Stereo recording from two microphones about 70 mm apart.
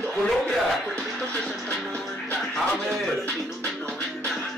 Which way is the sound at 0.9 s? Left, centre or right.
Centre.